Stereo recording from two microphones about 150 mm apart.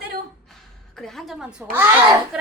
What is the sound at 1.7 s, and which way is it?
Speech, 15° right (ahead or behind).